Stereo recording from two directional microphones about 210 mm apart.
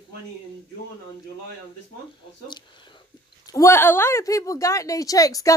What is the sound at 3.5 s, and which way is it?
A woman's voice, 10° left (ahead or behind).